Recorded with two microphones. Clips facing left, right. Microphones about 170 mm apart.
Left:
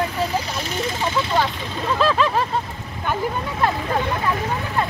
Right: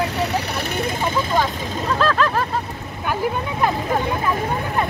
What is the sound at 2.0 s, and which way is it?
Speech, centre (ahead or behind).